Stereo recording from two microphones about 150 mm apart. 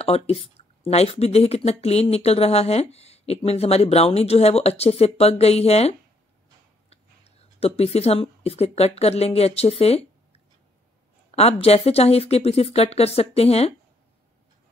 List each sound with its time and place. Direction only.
0.0 s speech: 40° left (ahead or behind)